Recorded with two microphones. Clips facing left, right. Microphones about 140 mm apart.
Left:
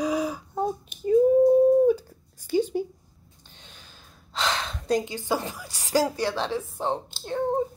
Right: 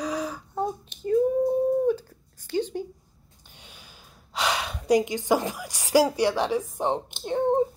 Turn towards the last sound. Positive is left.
turn(degrees=-20)  # may be behind; listen again after turning